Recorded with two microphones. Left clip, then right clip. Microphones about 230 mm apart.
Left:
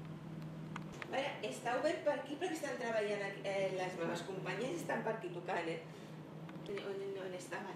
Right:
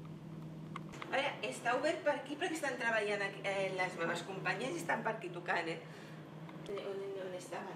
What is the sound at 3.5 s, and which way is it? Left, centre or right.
Speech, right.